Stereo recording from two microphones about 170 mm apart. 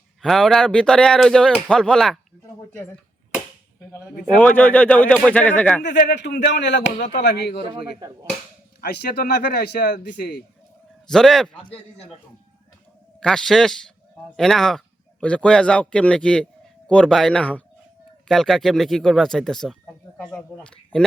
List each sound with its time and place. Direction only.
0.2 s a man's voice: centre (ahead or behind)
4.4 s speech: 10° left (ahead or behind)
5.8 s speech: 85° left
7.7 s speech: 25° right (ahead or behind)
8.8 s speech: 65° left (ahead or behind)
11.1 s a man's voice: centre (ahead or behind)
13.1 s a man's voice: 5° left (ahead or behind)